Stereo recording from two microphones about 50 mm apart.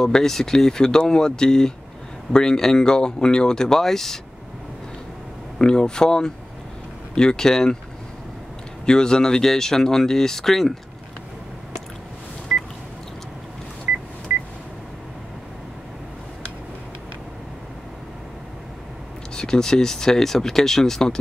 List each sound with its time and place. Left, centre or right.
0.0 s speech: centre
5.6 s speech: centre
8.8 s speech: centre
13.9 s telephone dialing: right
19.3 s speech: centre